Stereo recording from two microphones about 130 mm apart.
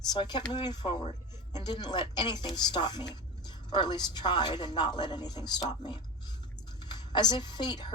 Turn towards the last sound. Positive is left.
turn(degrees=35)  # may be behind; listen again after turning